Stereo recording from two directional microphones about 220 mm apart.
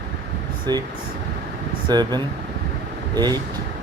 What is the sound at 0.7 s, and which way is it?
Speech, 20° right (ahead or behind).